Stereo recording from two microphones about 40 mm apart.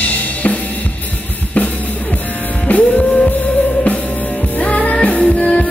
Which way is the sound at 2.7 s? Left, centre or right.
Left.